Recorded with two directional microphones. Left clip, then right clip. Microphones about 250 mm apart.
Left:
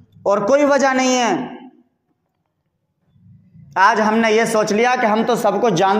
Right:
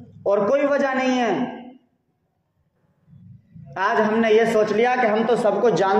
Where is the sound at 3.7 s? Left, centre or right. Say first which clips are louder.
Left 6 dB; left.